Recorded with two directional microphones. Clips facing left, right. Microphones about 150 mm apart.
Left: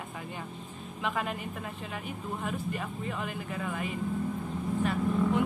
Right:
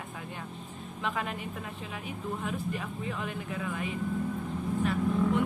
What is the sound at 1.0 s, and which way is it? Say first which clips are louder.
Speech: left 1 dB; centre (ahead or behind).